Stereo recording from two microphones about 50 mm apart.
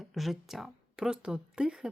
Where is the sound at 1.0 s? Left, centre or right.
Centre.